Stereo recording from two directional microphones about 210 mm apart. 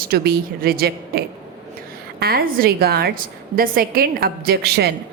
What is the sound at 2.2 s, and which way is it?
A woman's voice, 45° right (ahead or behind).